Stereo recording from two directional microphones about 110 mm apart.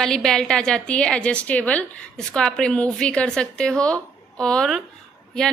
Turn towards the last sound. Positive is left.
turn(degrees=5)  # may be behind; listen again after turning